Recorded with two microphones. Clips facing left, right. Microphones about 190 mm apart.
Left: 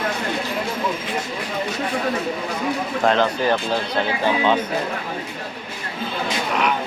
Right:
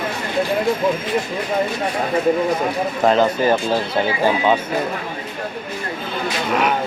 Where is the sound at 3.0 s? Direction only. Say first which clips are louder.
Right 3 dB; 5° right (ahead or behind).